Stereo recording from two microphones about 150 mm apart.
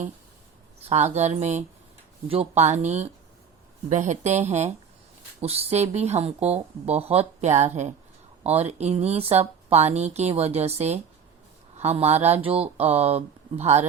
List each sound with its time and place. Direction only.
0.9 s speech: 50° right (ahead or behind)